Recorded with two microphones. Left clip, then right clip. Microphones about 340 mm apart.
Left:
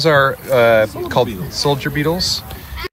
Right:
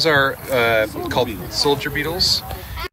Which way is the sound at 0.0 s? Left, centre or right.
Centre.